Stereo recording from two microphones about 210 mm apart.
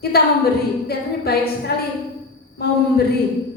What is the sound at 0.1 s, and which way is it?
Speech, 50° left (ahead or behind).